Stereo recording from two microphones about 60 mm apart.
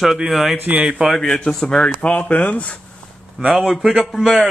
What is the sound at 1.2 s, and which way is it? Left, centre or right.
Speech, centre.